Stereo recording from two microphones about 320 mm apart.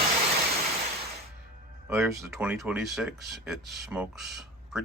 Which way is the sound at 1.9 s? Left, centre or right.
Centre.